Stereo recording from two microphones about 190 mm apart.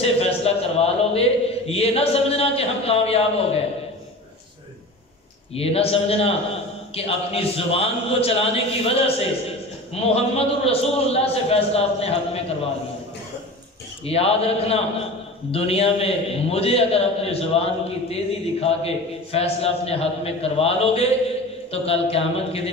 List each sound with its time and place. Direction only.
0.0 s a man's voice: 30° left (ahead or behind)
5.5 s a man's voice: 30° left (ahead or behind)
14.0 s a man's voice: 30° left (ahead or behind)